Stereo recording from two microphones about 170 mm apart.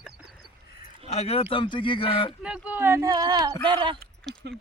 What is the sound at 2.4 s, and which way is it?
Speech, 5° right (ahead or behind).